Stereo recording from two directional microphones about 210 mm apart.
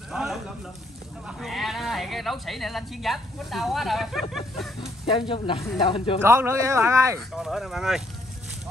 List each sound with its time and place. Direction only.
0.1 s a sound: centre (ahead or behind)
1.2 s speech: centre (ahead or behind)
4.7 s speech: 25° left (ahead or behind)
6.2 s speech: 10° right (ahead or behind)
7.2 s speech: centre (ahead or behind)